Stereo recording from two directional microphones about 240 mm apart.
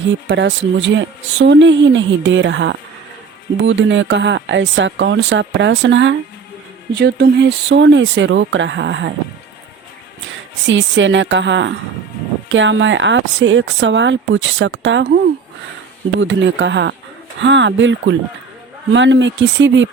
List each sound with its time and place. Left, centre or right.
0.3 s speech: right
10.7 s speech: right
16.2 s speech: right